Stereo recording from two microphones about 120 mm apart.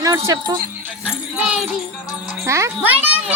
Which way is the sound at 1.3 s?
5° right (ahead or behind).